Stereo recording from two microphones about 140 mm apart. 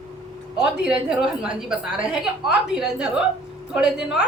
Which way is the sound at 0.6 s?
5° right (ahead or behind).